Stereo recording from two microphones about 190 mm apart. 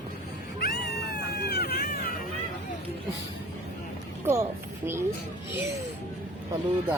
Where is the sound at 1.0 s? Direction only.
60° left (ahead or behind).